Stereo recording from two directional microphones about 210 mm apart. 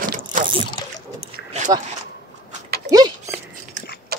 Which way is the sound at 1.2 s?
35° right (ahead or behind).